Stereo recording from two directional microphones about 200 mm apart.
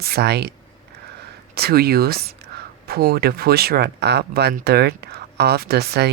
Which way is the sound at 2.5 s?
55° right (ahead or behind).